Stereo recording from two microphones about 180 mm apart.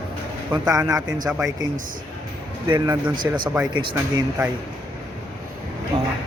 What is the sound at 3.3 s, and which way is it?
Speech, 15° right (ahead or behind).